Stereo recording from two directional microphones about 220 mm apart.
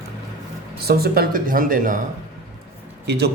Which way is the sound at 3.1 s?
50° right (ahead or behind).